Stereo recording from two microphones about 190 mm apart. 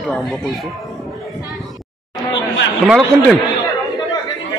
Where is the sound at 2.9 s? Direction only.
Centre (ahead or behind).